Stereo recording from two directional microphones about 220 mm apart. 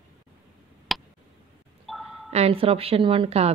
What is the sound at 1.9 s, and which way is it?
Glockenspiel, centre (ahead or behind).